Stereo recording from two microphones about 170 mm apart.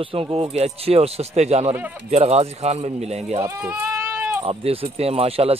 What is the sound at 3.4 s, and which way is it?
Speech, 20° right (ahead or behind).